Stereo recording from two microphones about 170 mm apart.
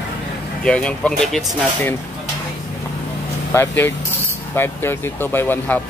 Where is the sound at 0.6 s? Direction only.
5° left (ahead or behind).